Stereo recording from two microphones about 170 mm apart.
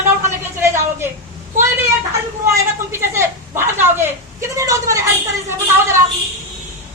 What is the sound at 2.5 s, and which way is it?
A man's voice, 15° right (ahead or behind).